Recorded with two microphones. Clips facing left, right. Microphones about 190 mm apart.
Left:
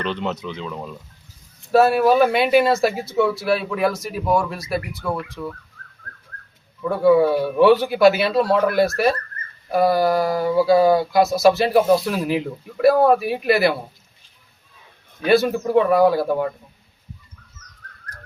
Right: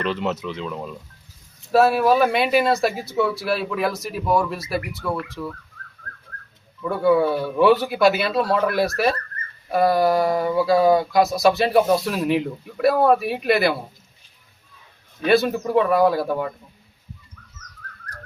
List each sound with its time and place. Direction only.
0.0 s speech: centre (ahead or behind)
6.8 s speech: centre (ahead or behind)
15.2 s speech: centre (ahead or behind)